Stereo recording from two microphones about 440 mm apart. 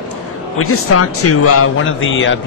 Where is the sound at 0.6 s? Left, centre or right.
Left.